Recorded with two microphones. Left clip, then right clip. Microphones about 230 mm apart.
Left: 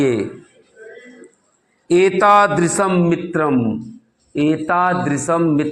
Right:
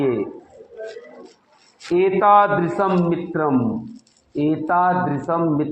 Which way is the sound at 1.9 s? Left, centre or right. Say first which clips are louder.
Left 2 dB; left.